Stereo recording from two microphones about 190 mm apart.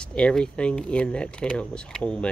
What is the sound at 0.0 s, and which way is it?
Speech, 5° left (ahead or behind).